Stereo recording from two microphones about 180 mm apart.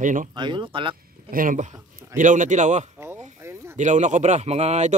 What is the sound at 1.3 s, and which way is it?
Speech, 50° right (ahead or behind).